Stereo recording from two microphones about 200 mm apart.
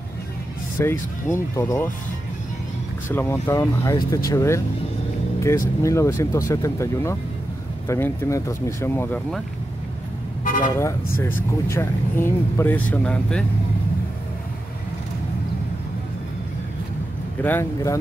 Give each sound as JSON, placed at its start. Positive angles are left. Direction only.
{"t": 0.7, "sound": "speech", "side_deg": 15}
{"t": 3.1, "sound": "speech", "side_deg": 10}
{"t": 10.4, "sound": "toot", "side_deg": 40}
{"t": 10.7, "sound": "speech", "side_deg": 15}
{"t": 17.4, "sound": "speech", "side_deg": 10}